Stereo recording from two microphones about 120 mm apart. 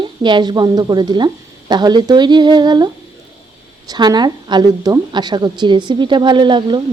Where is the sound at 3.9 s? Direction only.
35° right (ahead or behind).